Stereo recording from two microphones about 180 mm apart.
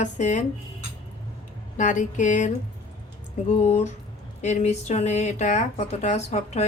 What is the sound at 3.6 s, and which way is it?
Speech, 40° left (ahead or behind).